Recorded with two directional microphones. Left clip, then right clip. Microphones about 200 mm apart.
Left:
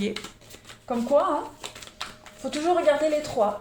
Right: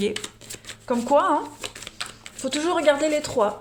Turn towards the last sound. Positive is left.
turn(degrees=-45)  # may be behind; listen again after turning